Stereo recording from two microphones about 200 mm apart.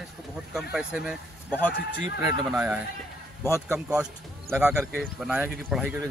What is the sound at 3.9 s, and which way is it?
Speech, 5° right (ahead or behind).